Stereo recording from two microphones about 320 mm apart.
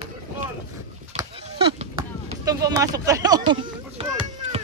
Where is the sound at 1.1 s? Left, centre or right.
Centre.